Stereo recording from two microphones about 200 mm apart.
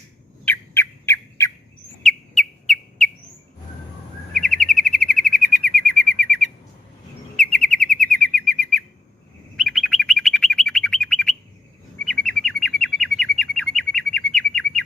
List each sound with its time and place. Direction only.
0.4 s bird: 10° left (ahead or behind)
2.0 s whistle: centre (ahead or behind)
4.4 s chirp: centre (ahead or behind)
7.3 s bird: 5° left (ahead or behind)
9.6 s chirp: centre (ahead or behind)